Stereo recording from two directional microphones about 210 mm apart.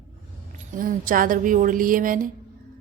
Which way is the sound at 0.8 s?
40° right (ahead or behind).